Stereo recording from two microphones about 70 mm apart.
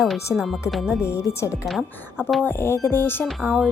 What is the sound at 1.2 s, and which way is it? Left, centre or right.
Speech, left.